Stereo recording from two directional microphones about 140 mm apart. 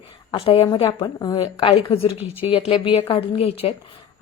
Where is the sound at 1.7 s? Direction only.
45° left (ahead or behind).